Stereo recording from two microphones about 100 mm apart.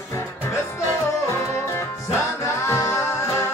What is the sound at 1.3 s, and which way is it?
Music, 25° left (ahead or behind).